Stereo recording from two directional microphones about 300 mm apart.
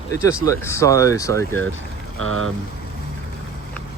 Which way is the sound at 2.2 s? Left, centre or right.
Right.